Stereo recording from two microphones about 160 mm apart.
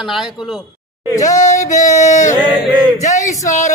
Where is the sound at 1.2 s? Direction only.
50° left (ahead or behind).